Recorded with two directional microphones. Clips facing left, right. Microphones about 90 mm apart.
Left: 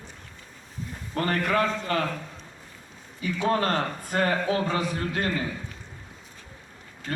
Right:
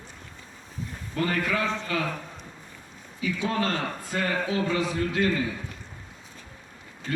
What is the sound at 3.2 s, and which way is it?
A man's voice, 40° left (ahead or behind).